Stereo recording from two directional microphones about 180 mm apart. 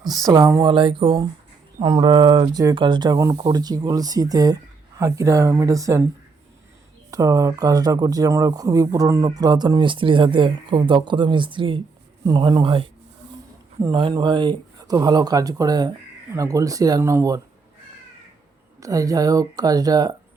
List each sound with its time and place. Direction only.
0.3 s speech: 20° right (ahead or behind)
7.1 s speech: 20° right (ahead or behind)
18.8 s speech: 20° right (ahead or behind)